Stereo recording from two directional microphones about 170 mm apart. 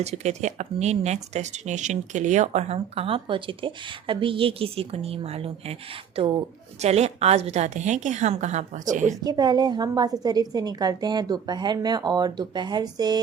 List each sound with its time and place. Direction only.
0.0 s speech: 40° right (ahead or behind)
6.8 s a woman's voice: 40° right (ahead or behind)
9.2 s a woman's voice: 25° right (ahead or behind)